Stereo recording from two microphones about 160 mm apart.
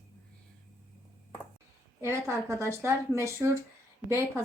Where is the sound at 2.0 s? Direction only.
15° right (ahead or behind).